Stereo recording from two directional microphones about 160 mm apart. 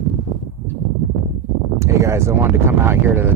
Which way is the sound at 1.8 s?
15° right (ahead or behind).